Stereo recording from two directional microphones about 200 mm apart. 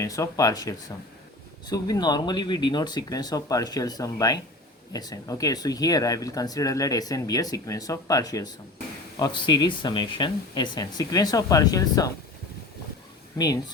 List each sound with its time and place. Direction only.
0.0 s speech: 15° left (ahead or behind)